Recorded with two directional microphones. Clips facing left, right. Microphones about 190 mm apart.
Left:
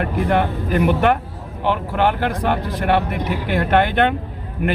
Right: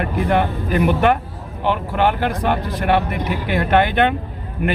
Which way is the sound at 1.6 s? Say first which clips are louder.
Even; 15° right (ahead or behind).